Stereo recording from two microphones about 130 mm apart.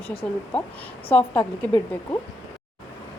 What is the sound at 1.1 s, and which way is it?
Speech, 10° left (ahead or behind).